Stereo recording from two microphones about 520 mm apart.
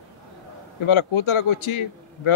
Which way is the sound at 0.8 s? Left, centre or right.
Left.